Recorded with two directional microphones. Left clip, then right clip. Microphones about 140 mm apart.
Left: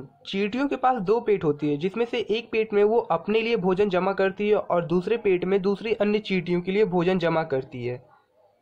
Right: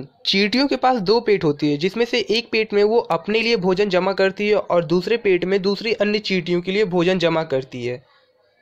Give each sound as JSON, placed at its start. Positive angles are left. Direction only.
{"t": 0.3, "sound": "speech", "side_deg": -35}